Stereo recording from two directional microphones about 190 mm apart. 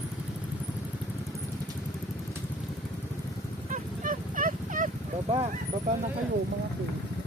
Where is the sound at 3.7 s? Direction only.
45° right (ahead or behind).